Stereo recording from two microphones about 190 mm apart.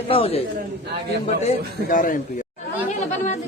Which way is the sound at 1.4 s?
45° left (ahead or behind).